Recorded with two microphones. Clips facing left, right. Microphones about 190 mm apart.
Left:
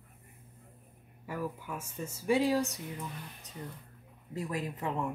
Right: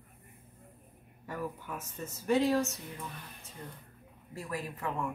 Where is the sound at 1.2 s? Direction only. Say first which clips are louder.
Left 1 dB; 10° left (ahead or behind).